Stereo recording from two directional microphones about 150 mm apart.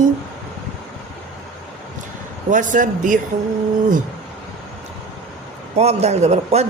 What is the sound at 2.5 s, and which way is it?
Speech, 60° right (ahead or behind).